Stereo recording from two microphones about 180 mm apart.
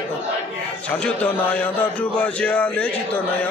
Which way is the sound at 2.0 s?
5° left (ahead or behind).